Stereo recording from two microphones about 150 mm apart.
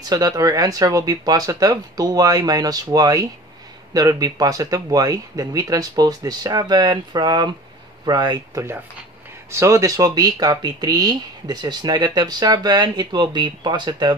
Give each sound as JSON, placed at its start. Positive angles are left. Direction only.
{"t": 0.0, "sound": "speech", "side_deg": -25}